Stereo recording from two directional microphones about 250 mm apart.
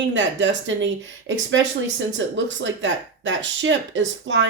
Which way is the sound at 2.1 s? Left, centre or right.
Right.